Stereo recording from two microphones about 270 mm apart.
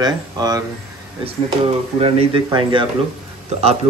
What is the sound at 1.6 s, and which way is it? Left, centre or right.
Speech, right.